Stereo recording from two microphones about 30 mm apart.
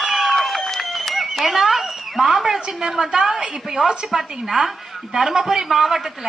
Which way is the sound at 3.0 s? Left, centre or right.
Right.